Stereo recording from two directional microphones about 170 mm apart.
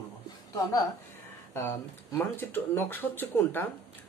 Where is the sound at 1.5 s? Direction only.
15° left (ahead or behind).